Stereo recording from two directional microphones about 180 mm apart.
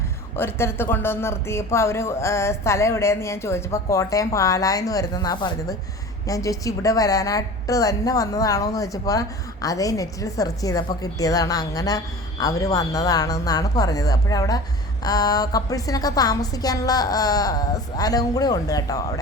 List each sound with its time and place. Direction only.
0.3 s a woman's voice: 10° left (ahead or behind)